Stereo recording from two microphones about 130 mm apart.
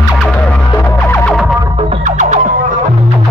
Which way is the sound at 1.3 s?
5° right (ahead or behind).